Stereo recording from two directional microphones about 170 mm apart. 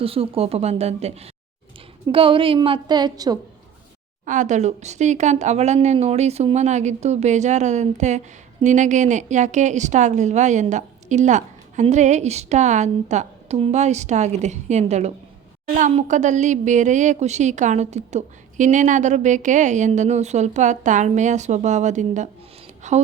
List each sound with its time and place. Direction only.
0.0 s a woman's voice: 35° right (ahead or behind)
4.3 s a woman's voice: 45° right (ahead or behind)